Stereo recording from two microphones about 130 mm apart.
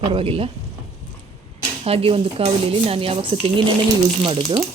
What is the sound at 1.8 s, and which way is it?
A woman's voice, 50° right (ahead or behind).